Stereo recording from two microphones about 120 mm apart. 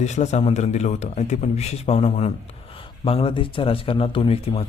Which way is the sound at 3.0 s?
50° left (ahead or behind).